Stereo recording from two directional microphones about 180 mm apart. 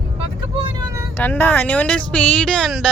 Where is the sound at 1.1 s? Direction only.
10° left (ahead or behind).